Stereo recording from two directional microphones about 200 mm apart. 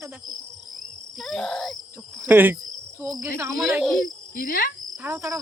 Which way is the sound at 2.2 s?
10° right (ahead or behind).